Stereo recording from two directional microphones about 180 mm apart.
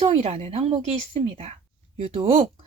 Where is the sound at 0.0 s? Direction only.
35° right (ahead or behind).